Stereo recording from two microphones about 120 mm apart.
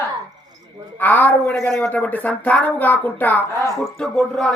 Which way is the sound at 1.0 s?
15° left (ahead or behind).